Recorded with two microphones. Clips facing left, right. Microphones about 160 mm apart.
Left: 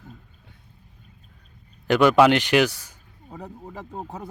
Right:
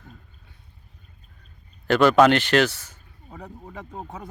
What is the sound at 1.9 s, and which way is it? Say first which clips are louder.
Speech: even; 15° left (ahead or behind).